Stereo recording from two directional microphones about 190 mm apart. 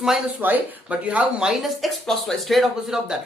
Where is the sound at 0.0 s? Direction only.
5° right (ahead or behind).